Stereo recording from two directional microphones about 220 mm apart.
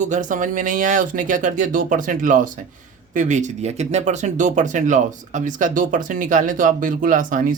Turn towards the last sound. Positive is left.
turn(degrees=-35)  # may be behind; listen again after turning